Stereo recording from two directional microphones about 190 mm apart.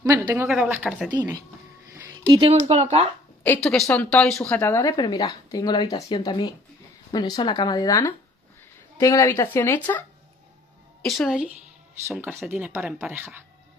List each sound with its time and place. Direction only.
0.0 s speech: 20° right (ahead or behind)
2.0 s speech: 20° right (ahead or behind)
3.4 s speech: 5° left (ahead or behind)
11.1 s speech: centre (ahead or behind)